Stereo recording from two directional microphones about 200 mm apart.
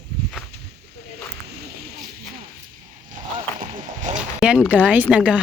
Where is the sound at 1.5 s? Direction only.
50° right (ahead or behind).